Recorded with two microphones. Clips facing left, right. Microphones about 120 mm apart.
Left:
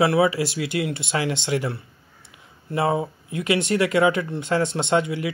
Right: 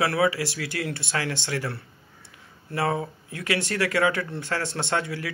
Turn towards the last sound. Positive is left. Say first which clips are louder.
# left 6 dB
turn(degrees=20)  # may be behind; listen again after turning